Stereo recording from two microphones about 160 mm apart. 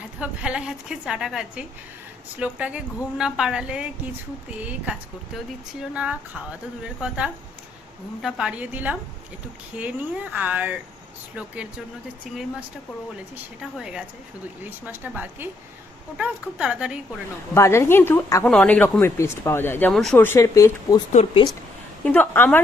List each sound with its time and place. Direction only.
0.2 s a woman's voice: 5° right (ahead or behind)
8.2 s a woman's voice: 5° right (ahead or behind)
17.5 s speech: 15° left (ahead or behind)
19.9 s a woman's voice: centre (ahead or behind)
20.1 s speech: 15° left (ahead or behind)
22.0 s speech: 10° left (ahead or behind)